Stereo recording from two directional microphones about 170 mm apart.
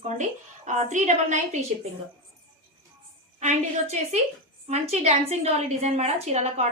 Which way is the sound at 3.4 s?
40° right (ahead or behind).